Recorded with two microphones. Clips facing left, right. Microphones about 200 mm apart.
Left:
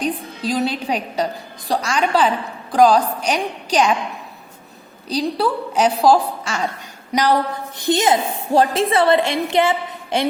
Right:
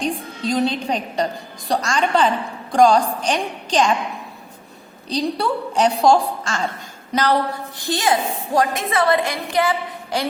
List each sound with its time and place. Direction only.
0.0 s a woman's voice: 5° left (ahead or behind)
5.0 s a woman's voice: 5° left (ahead or behind); by 10.2 s 25° left (ahead or behind)